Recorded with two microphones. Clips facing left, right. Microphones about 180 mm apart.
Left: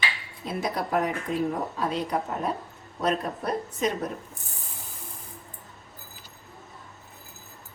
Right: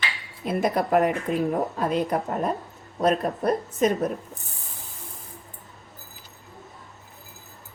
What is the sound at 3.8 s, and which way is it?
Speech, 50° right (ahead or behind).